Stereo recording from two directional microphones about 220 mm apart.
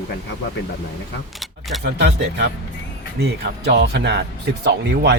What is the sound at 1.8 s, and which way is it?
Speech, 50° right (ahead or behind).